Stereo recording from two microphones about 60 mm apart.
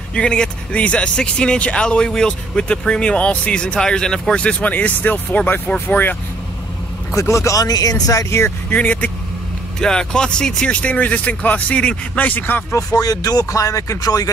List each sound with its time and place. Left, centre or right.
0.1 s speech: centre; by 6.1 s left
7.2 s speech: left
8.3 s speech: left
8.6 s speech: left
9.8 s speech: centre
10.8 s speech: left
12.7 s speech: left